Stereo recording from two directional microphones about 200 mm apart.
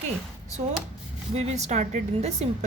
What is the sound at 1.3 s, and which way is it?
A woman's voice, 35° right (ahead or behind).